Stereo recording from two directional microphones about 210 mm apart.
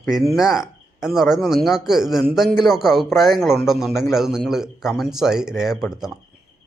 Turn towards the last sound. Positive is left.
turn(degrees=0)  # may be behind; listen again after turning